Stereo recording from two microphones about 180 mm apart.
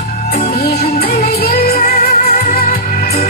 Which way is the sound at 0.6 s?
65° left (ahead or behind).